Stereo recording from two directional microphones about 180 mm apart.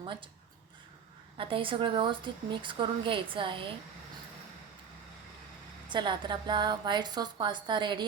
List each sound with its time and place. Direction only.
0.0 s speech: 25° right (ahead or behind)
1.4 s a woman's voice: 30° right (ahead or behind)
5.9 s a woman's voice: 25° right (ahead or behind)